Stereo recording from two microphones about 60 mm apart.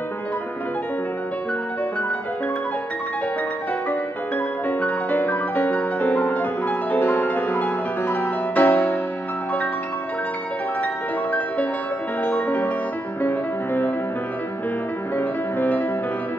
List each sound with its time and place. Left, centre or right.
4.6 s music: left
12.2 s music: left
15.1 s music: left